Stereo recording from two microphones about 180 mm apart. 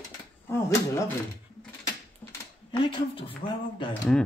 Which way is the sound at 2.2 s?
10° left (ahead or behind).